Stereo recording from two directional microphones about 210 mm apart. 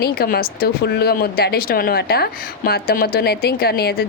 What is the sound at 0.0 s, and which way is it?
Speech, 45° left (ahead or behind).